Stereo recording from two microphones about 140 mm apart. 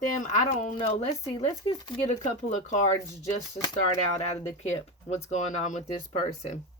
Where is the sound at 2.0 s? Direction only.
55° left (ahead or behind).